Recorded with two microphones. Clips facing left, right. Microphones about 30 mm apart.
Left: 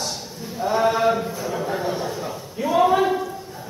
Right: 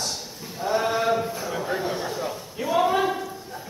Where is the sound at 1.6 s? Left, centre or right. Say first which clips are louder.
Left 2 dB; centre.